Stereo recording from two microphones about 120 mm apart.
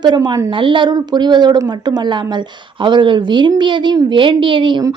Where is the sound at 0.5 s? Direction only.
45° right (ahead or behind).